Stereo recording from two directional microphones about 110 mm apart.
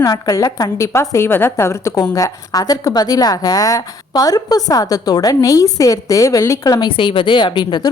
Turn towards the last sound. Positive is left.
turn(degrees=45)  # may be behind; listen again after turning